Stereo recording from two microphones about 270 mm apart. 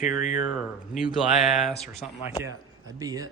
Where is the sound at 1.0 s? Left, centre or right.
Centre.